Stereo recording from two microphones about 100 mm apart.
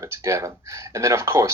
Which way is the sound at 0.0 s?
30° right (ahead or behind).